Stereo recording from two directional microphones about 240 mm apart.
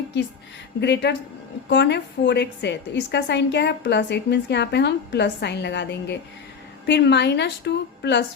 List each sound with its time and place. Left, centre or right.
0.8 s a woman's voice: left